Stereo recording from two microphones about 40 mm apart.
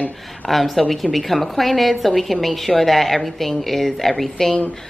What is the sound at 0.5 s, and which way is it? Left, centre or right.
A woman's voice, centre.